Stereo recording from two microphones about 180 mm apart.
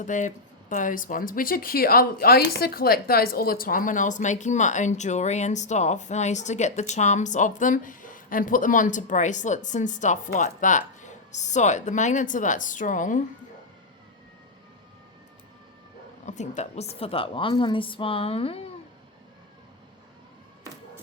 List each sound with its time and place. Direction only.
0.0 s speech: 45° left (ahead or behind)
16.2 s a woman's voice: 40° left (ahead or behind)